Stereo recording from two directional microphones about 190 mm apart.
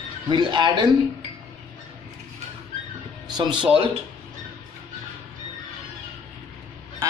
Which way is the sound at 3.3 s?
25° right (ahead or behind).